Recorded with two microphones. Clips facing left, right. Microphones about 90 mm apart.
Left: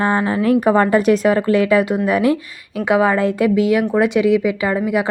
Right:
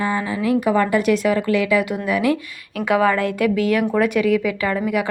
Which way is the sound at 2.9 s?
20° left (ahead or behind).